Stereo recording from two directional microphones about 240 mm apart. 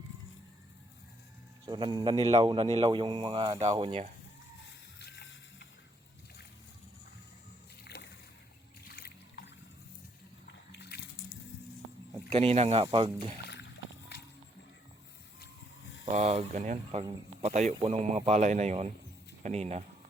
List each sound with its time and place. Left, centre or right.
1.6 s a man's voice: centre
4.9 s music: left
9.0 s trickle: left
10.4 s a sound: left
12.3 s a man's voice: right
13.5 s a sound: left
16.1 s a man's voice: right